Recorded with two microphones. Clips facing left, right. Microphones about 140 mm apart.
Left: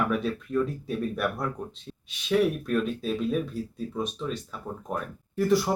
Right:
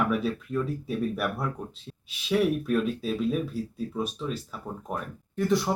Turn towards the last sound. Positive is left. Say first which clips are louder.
# left 2 dB
turn(degrees=0)  # may be behind; listen again after turning